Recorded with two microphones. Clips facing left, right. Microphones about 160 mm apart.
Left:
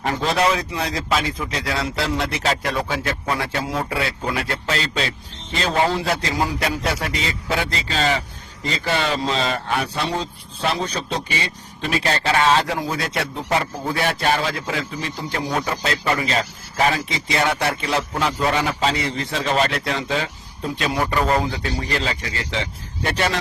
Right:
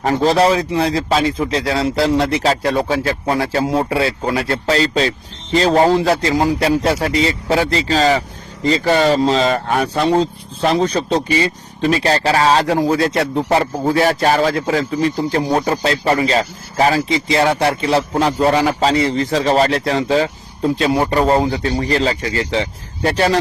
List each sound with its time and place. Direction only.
0.0 s speech: 35° right (ahead or behind)